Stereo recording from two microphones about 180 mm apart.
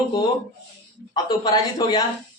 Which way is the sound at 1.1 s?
20° left (ahead or behind).